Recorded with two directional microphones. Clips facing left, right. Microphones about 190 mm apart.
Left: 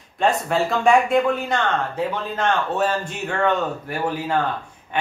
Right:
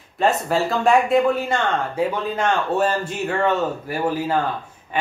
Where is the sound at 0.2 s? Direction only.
Centre (ahead or behind).